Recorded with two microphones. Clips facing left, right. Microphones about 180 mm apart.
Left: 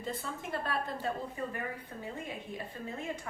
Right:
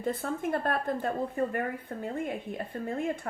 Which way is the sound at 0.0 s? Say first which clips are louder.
Right 8 dB; 55° right (ahead or behind).